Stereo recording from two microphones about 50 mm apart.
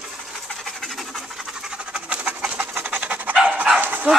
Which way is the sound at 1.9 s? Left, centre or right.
Right.